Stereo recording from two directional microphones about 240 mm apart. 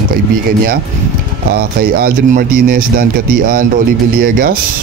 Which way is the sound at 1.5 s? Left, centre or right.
Right.